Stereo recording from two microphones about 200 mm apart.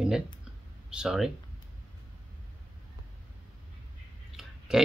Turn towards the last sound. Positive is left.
turn(degrees=-5)  # may be behind; listen again after turning